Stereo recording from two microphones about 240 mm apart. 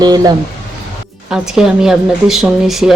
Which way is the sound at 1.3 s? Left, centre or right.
Centre.